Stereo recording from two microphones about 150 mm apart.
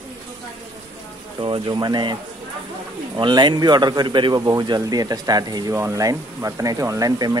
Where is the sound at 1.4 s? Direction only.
30° right (ahead or behind).